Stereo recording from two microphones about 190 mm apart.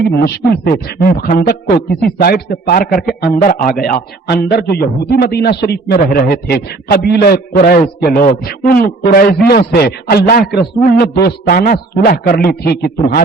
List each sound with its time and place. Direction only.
0.0 s a man's voice: 55° left (ahead or behind)